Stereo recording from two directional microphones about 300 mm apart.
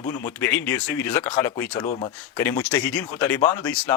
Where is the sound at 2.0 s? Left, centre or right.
Centre.